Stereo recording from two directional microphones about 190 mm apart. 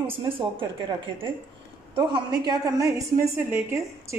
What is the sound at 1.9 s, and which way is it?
A woman's voice, 25° right (ahead or behind).